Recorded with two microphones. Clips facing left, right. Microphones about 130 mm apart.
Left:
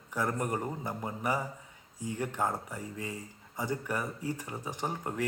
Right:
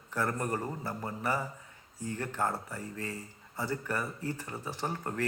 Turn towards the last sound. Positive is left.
turn(degrees=10)  # may be behind; listen again after turning